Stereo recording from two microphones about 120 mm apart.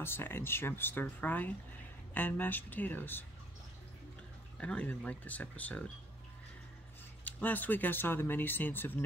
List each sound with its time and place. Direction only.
0.0 s speech: 20° left (ahead or behind)
4.6 s speech: 10° left (ahead or behind)
7.2 s speech: 15° left (ahead or behind)